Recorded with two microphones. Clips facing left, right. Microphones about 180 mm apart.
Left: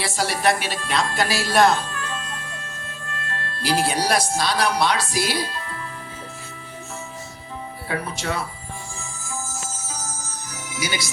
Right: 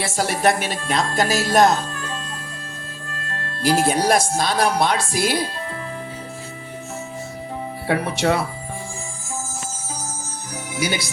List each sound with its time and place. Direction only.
0.0 s music: 50° right (ahead or behind)
3.6 s music: 45° right (ahead or behind)
7.9 s speech: 70° right (ahead or behind)
10.8 s speech: 55° right (ahead or behind)